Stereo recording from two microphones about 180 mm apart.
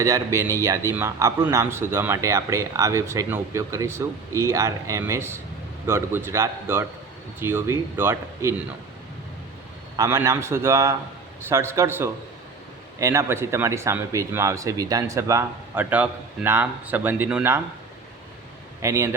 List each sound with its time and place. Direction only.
0.0 s speech: 15° right (ahead or behind)
10.0 s speech: 15° right (ahead or behind)
18.8 s speech: 15° right (ahead or behind)